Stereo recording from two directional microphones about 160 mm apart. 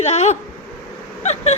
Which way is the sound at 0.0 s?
45° left (ahead or behind).